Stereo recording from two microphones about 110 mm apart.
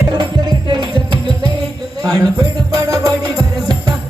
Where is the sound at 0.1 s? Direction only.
45° right (ahead or behind).